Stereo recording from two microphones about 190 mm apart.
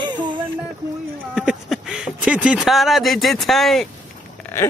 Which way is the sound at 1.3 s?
5° right (ahead or behind).